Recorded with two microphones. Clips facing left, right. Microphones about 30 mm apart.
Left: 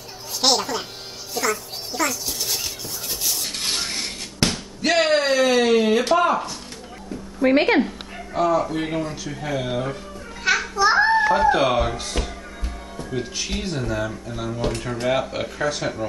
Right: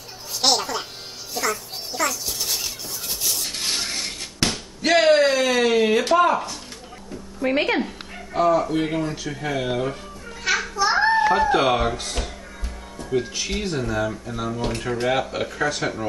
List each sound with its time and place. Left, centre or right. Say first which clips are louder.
0.4 s music: left 1 dB; centre
3.3 s a sound: even; centre
7.3 s speech: left 4 dB; centre
8.4 s speech: right 1 dB; centre
10.4 s children playing: left 3 dB; centre
11.0 s a sound: right 1 dB; centre
11.3 s speech: left 1 dB; centre